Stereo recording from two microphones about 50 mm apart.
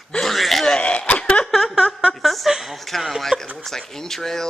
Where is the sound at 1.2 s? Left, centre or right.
Left.